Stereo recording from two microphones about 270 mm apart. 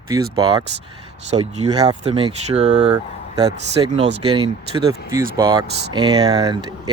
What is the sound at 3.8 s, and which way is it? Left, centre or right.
Speech, right.